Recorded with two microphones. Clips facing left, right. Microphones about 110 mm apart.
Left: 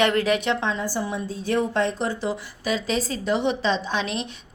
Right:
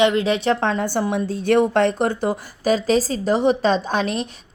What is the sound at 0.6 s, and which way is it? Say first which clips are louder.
A woman's voice: right 5 dB; 60° right (ahead or behind).